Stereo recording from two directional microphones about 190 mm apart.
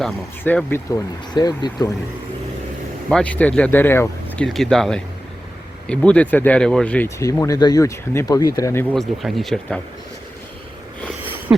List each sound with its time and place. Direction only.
0.0 s speech: 10° left (ahead or behind)
1.3 s speech: 20° left (ahead or behind)
3.1 s speech: 5° left (ahead or behind)
9.0 s speech: centre (ahead or behind)